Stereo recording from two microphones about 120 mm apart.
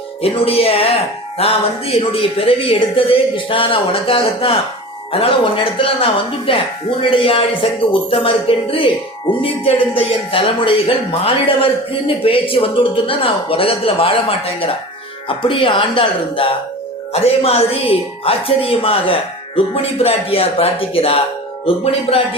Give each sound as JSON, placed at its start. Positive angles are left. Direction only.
{"t": 0.2, "sound": "speech", "side_deg": 50}